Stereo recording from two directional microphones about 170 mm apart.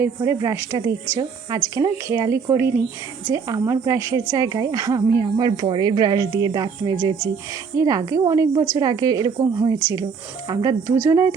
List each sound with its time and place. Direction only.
0.2 s speech: 20° right (ahead or behind)